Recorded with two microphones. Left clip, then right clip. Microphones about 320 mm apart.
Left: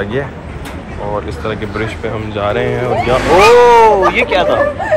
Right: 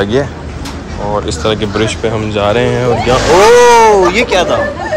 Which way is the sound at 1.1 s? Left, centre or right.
Centre.